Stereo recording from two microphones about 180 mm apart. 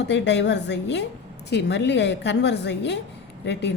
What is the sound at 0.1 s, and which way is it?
A woman's voice, 75° left (ahead or behind).